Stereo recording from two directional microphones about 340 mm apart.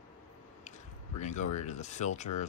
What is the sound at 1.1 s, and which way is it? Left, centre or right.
Speech, left.